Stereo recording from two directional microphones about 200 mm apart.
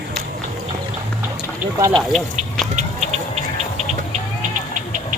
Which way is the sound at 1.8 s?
15° right (ahead or behind).